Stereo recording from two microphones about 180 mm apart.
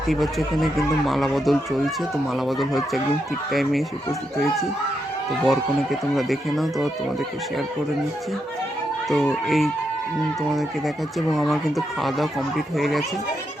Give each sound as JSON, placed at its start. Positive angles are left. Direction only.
{"t": 0.1, "sound": "speech", "side_deg": 0}
{"t": 5.5, "sound": "speech", "side_deg": 0}
{"t": 9.0, "sound": "speech", "side_deg": 0}